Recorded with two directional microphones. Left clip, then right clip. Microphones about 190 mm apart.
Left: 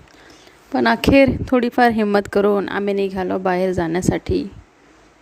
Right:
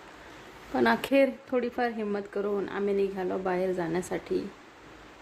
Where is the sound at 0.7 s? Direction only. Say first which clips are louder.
Left 10 dB; 45° left (ahead or behind).